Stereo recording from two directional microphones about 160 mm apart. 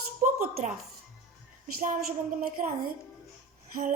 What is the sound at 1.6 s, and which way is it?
A woman's voice, 60° right (ahead or behind).